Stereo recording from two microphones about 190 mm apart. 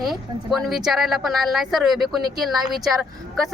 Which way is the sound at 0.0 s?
Centre (ahead or behind).